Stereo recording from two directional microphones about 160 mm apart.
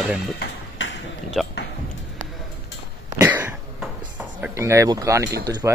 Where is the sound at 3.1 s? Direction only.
15° right (ahead or behind).